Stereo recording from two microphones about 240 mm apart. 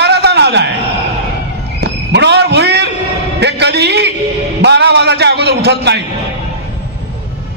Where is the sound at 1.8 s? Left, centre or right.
Right.